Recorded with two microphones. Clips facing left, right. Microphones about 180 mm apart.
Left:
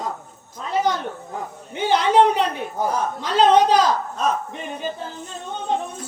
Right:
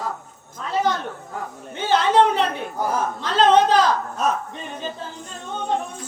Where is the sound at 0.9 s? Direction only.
15° left (ahead or behind).